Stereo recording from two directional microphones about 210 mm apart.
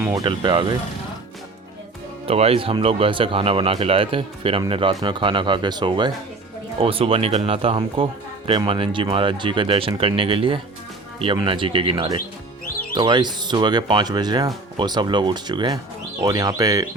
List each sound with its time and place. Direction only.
0.0 s speech: 10° right (ahead or behind)
0.3 s speech: 20° right (ahead or behind)
2.2 s speech: 30° right (ahead or behind)